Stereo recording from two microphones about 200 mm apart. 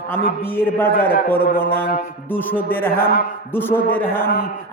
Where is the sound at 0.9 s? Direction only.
45° left (ahead or behind).